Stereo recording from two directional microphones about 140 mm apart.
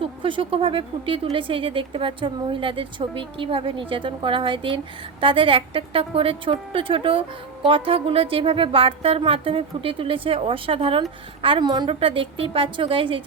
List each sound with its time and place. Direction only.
0.0 s speech: 40° right (ahead or behind)